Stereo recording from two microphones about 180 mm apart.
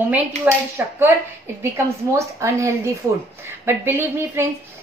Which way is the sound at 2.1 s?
15° right (ahead or behind).